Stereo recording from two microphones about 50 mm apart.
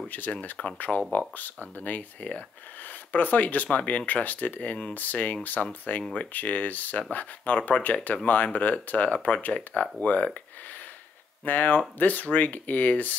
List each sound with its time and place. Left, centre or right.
0.1 s speech: left
11.4 s speech: left